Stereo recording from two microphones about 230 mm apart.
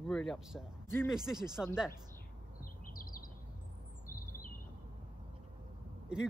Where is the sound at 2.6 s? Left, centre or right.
Left.